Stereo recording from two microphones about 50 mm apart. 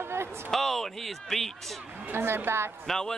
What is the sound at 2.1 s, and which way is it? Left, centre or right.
Speech, right.